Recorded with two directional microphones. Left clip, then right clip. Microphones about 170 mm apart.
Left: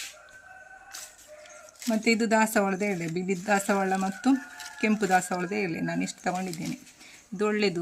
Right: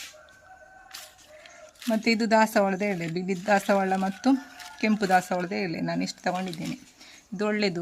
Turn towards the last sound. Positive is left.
turn(degrees=-20)  # may be behind; listen again after turning